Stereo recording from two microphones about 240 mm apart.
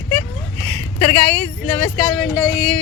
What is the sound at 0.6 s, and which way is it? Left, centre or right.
Speech, right.